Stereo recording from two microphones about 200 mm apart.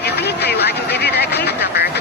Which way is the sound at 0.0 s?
55° left (ahead or behind).